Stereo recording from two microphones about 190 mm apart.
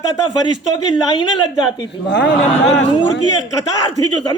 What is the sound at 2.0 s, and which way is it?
Speech, 70° left (ahead or behind).